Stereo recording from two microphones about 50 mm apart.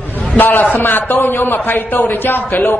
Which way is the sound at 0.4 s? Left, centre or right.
Left.